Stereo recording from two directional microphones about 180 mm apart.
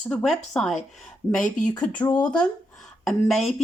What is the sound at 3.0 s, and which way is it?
Speech, centre (ahead or behind).